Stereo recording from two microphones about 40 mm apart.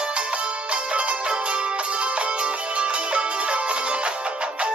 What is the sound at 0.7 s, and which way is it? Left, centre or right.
Music, right.